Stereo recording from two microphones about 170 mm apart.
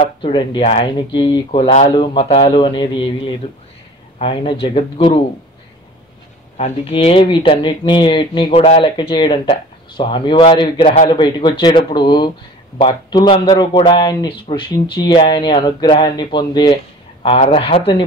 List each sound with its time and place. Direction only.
0.0 s speech: 30° left (ahead or behind)
6.5 s speech: 35° left (ahead or behind)